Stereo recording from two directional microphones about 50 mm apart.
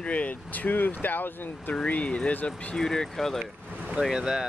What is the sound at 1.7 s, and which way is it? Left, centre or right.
Speech, left.